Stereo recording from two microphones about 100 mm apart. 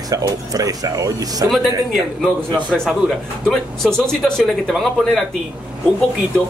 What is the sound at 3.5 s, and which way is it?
Speech, 5° left (ahead or behind).